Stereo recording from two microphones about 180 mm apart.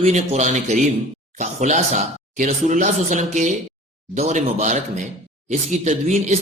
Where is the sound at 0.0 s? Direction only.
35° right (ahead or behind).